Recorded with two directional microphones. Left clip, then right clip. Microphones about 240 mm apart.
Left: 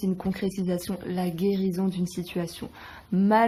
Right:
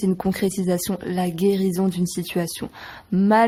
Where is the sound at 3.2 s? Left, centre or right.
Right.